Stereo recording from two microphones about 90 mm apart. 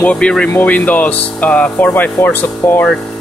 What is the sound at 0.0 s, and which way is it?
Speech, 15° left (ahead or behind).